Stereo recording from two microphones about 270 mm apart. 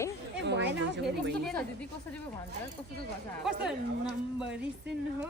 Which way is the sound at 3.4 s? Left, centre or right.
Centre.